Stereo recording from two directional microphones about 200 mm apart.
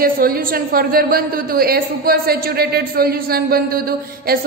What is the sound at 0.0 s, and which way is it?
A woman's voice, 45° right (ahead or behind).